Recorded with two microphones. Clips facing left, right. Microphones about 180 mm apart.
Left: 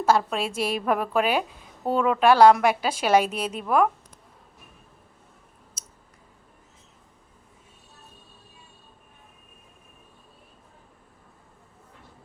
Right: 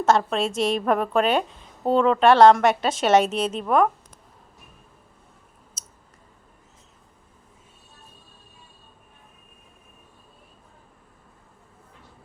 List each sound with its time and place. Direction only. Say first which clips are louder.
0.0 s a woman's voice: right 2 dB; 5° left (ahead or behind)